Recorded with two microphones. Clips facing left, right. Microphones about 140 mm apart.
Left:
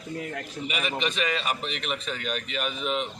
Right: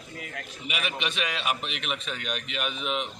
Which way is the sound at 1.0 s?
5° right (ahead or behind).